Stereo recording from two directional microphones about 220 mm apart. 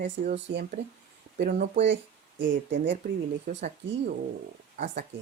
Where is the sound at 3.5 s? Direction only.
40° right (ahead or behind).